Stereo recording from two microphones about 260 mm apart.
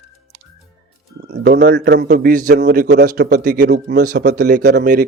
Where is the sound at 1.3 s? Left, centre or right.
Right.